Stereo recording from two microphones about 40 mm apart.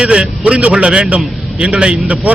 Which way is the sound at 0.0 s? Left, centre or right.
Right.